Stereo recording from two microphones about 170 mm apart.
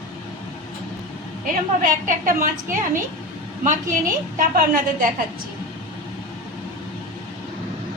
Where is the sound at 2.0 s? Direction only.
50° right (ahead or behind).